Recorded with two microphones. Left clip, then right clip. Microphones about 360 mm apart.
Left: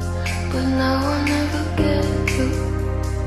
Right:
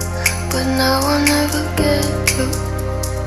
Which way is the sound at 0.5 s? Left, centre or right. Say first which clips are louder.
Right 3 dB; right.